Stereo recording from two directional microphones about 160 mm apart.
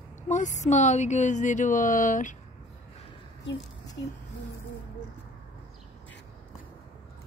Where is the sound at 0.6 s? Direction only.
50° left (ahead or behind).